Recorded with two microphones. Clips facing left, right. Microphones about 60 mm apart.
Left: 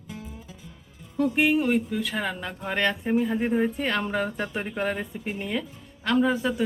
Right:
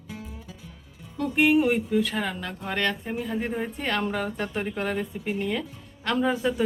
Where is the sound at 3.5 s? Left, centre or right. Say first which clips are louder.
Left 4 dB; centre.